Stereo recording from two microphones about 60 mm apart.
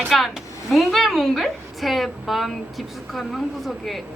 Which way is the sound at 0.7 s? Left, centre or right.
Centre.